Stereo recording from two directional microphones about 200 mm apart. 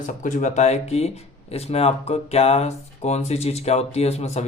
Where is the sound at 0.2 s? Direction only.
40° left (ahead or behind).